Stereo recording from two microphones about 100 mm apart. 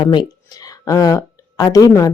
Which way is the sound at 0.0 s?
50° left (ahead or behind).